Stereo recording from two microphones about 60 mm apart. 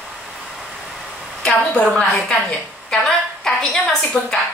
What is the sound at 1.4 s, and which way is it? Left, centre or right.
A woman's voice, centre.